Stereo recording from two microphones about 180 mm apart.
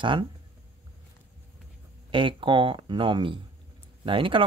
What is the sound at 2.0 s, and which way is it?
Speech, 30° right (ahead or behind).